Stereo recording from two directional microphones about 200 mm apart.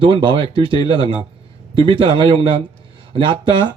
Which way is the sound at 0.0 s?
25° right (ahead or behind).